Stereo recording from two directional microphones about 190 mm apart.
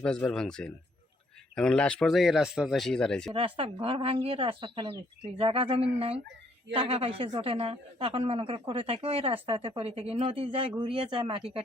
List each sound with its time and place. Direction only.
0.0 s speech: 5° left (ahead or behind)
3.3 s speech: 30° right (ahead or behind)